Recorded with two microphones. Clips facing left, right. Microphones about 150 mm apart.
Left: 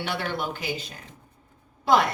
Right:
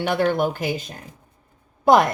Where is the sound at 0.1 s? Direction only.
45° right (ahead or behind).